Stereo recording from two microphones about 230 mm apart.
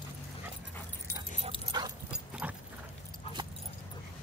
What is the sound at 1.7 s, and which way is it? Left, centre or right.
Dog, centre.